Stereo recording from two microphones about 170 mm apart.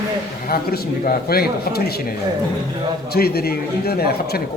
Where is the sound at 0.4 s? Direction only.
65° left (ahead or behind).